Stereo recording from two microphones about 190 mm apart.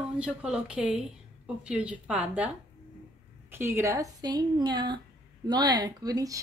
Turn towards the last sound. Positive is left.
turn(degrees=-20)  # may be behind; listen again after turning